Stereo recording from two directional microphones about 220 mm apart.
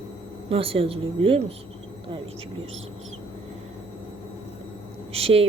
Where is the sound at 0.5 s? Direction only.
25° right (ahead or behind).